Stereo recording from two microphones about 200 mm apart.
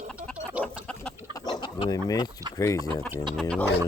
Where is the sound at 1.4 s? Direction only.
20° left (ahead or behind).